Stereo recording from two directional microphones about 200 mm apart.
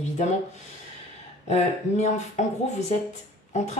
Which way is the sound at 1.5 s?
35° left (ahead or behind).